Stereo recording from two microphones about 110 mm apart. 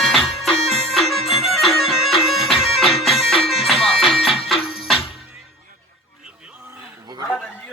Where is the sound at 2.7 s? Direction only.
Centre (ahead or behind).